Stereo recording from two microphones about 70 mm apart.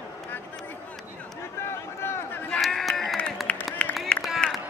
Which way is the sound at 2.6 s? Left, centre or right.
Centre.